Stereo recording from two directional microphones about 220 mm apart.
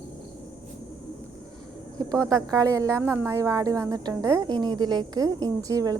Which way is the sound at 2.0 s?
15° right (ahead or behind).